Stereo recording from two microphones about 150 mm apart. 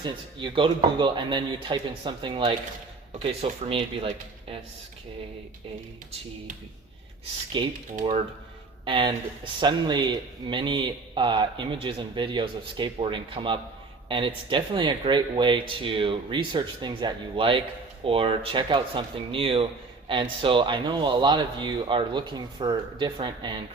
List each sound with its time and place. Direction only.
0.0 s speech: 30° right (ahead or behind)
7.6 s speech: 35° right (ahead or behind)
8.8 s speech: 35° right (ahead or behind)